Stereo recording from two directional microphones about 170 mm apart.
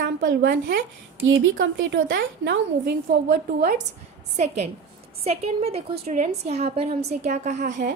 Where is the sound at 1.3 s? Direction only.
80° right.